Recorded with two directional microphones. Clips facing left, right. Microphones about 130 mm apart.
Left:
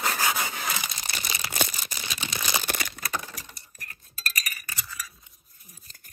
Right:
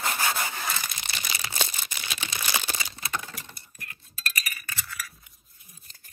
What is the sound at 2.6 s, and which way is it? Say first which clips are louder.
Crumpling: left 3 dB; 55° left (ahead or behind).